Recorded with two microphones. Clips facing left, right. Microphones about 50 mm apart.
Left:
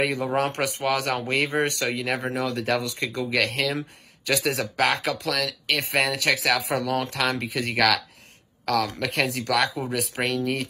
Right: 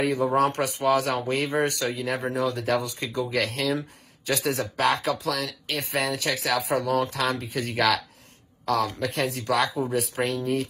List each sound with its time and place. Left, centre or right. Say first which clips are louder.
0.0 s speech: right 2 dB; left